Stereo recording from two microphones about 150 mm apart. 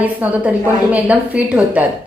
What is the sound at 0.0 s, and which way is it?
A woman's voice, 10° right (ahead or behind).